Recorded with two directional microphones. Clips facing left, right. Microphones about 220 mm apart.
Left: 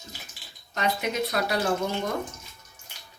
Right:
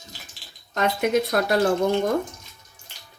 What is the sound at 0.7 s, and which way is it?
Speech, 50° right (ahead or behind).